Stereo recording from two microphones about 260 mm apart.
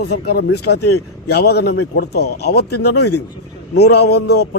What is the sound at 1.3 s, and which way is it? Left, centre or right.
A man's voice, left.